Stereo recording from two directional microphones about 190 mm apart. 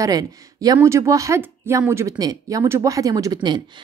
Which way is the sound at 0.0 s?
20° right (ahead or behind).